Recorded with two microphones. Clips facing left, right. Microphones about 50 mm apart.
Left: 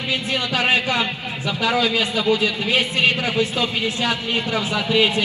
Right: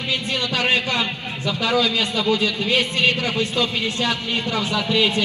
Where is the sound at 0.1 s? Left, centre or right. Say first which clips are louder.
Left 1 dB; centre.